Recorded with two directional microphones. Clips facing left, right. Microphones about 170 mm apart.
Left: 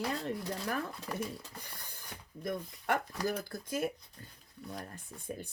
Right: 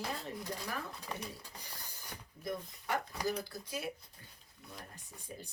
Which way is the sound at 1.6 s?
55° left (ahead or behind).